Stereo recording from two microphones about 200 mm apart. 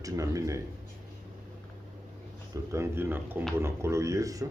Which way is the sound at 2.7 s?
15° right (ahead or behind).